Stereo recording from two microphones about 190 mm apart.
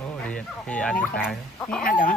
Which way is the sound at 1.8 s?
45° left (ahead or behind).